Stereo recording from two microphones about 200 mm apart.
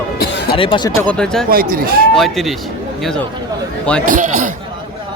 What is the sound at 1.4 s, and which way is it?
Speech, 45° right (ahead or behind).